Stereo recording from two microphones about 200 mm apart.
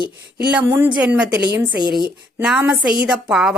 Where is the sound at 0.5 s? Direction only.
10° right (ahead or behind).